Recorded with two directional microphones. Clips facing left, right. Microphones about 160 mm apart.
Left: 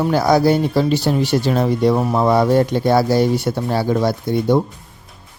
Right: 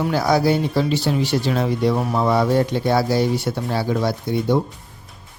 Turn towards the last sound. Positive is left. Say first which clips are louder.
# left 3 dB
turn(degrees=45)  # may be behind; listen again after turning